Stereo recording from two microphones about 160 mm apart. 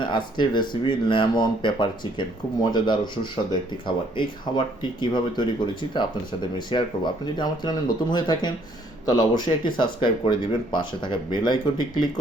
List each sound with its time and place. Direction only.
0.0 s speech: 30° left (ahead or behind)